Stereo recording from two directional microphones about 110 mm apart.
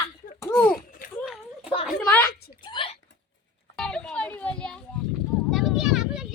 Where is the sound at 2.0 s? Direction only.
20° left (ahead or behind).